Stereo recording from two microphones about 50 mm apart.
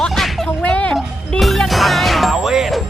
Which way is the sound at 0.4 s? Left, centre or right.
Left.